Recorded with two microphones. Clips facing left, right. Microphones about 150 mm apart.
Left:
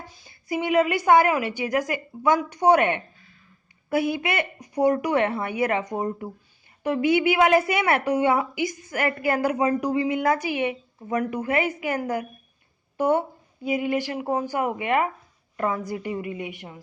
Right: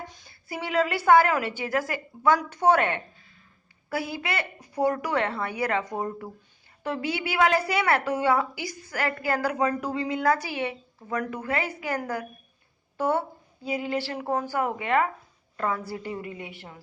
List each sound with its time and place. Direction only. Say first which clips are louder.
0.3 s a woman's voice: left 9 dB; 15° left (ahead or behind)